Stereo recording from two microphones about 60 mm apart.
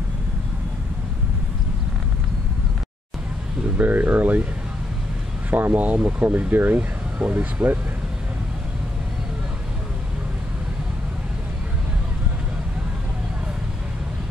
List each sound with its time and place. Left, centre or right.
3.6 s speech: right
5.5 s speech: right
7.6 s speech: centre